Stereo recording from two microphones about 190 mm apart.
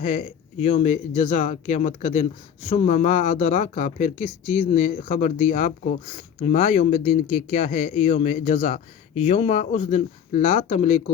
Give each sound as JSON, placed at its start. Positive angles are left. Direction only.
{"t": 0.0, "sound": "speech", "side_deg": 35}